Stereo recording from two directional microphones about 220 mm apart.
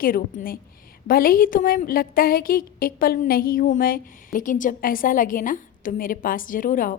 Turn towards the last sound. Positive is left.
turn(degrees=40)  # may be behind; listen again after turning